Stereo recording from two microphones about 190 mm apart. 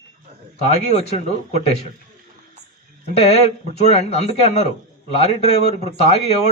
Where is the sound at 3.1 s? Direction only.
35° left (ahead or behind).